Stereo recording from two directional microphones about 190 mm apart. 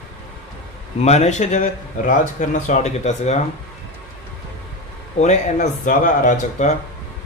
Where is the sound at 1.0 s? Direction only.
35° left (ahead or behind).